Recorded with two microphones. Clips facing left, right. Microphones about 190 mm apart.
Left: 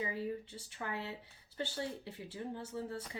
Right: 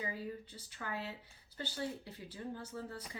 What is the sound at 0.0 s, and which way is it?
Speech, 25° left (ahead or behind).